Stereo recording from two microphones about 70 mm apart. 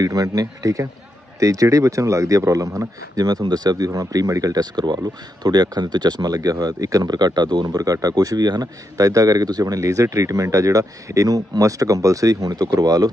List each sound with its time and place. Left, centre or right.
0.0 s speech: right